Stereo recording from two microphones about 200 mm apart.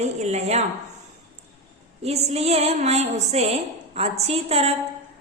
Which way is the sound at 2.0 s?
30° right (ahead or behind).